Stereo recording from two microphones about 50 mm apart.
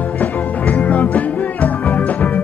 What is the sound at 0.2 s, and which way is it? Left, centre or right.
Music, left.